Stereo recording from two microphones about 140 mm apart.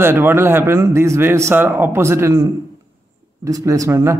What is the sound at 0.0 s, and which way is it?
A man's voice, 15° right (ahead or behind).